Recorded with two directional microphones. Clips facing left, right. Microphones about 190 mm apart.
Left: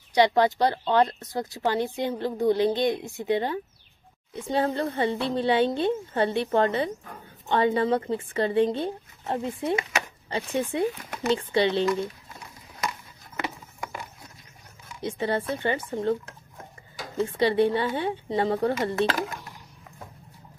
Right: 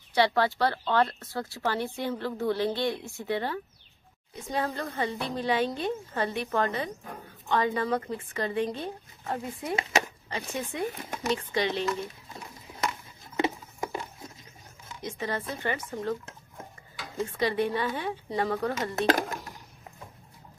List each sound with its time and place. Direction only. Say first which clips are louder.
0.1 s speech: left 4 dB; 15° left (ahead or behind)
4.5 s a woman's voice: left 6 dB; 30° left (ahead or behind)
15.0 s speech: left 6 dB; 30° left (ahead or behind)
17.2 s speech: left 6 dB; 30° left (ahead or behind)
18.9 s speech: even; 45° right (ahead or behind)